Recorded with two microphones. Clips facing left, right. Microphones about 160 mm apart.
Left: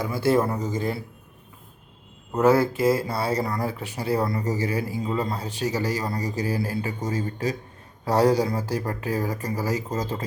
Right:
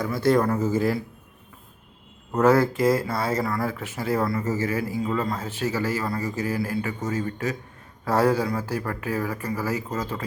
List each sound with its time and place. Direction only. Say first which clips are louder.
0.1 s speech: right 1 dB; 10° left (ahead or behind)
0.6 s speech: right 4 dB; 5° right (ahead or behind)
2.4 s speech: even; 30° left (ahead or behind)
4.8 s speech: right 1 dB; 20° left (ahead or behind)
5.6 s speech: even; 40° left (ahead or behind)